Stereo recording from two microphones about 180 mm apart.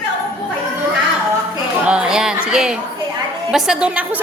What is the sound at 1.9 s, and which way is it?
Music, 5° right (ahead or behind).